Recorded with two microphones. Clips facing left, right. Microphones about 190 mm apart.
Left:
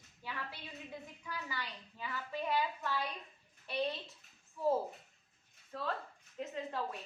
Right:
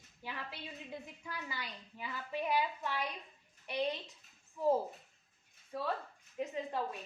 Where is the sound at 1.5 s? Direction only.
20° right (ahead or behind).